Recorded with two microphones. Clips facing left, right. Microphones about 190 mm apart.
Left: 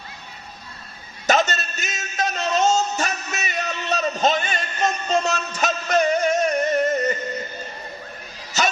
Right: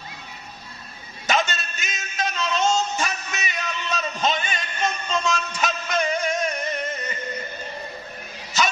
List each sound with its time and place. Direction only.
1.2 s music: 40° left (ahead or behind)